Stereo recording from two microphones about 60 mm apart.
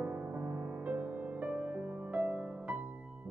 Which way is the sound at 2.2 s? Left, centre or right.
Centre.